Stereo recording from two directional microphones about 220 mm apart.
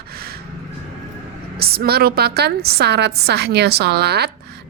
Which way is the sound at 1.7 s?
45° right (ahead or behind).